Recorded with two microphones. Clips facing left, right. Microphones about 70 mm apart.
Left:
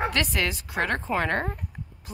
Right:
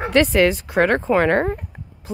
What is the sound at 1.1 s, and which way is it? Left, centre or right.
Speech, right.